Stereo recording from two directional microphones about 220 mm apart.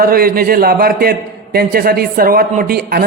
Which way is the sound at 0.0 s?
40° right (ahead or behind).